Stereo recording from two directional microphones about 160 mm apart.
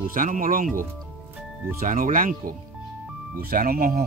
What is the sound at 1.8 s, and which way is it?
Speech, 55° right (ahead or behind).